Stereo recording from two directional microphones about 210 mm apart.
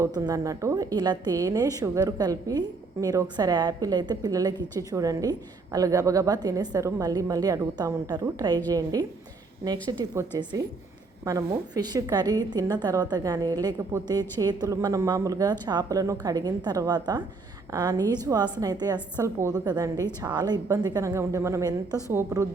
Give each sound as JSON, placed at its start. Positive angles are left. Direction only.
{"t": 0.0, "sound": "a woman's voice", "side_deg": -15}